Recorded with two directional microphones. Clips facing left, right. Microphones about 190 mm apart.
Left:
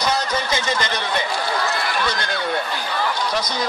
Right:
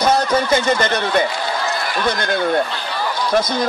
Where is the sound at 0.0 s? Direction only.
55° right (ahead or behind).